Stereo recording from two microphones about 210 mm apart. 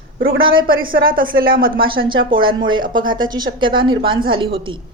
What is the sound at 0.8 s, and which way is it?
A woman's voice, 45° right (ahead or behind).